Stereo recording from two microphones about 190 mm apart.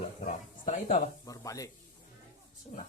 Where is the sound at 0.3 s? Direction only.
40° left (ahead or behind).